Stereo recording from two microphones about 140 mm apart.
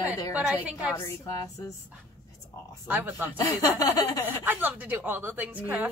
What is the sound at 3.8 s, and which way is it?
Speech, 25° left (ahead or behind).